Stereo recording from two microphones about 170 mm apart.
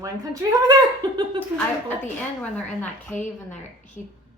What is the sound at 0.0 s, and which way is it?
Speech, 20° right (ahead or behind).